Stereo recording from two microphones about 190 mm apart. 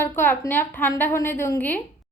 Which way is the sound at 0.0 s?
10° left (ahead or behind).